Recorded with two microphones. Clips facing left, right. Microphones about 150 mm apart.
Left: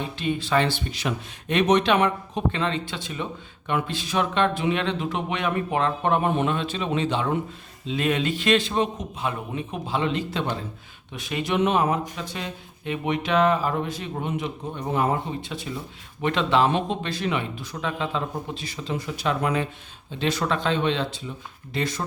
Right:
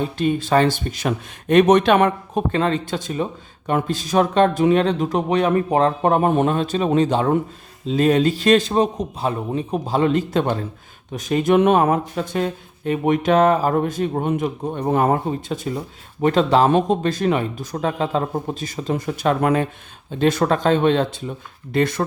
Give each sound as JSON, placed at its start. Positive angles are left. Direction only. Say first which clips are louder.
{"t": 0.0, "sound": "speech", "louder": "right 7 dB", "side_deg": -45}